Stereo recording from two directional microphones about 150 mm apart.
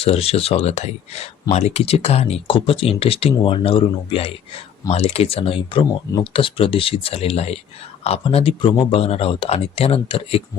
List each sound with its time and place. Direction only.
0.0 s speech: 40° left (ahead or behind)